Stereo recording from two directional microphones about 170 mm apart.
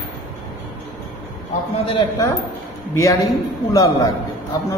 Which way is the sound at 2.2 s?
20° left (ahead or behind).